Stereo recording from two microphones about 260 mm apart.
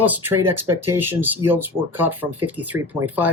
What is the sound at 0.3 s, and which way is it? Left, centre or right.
Speech, right.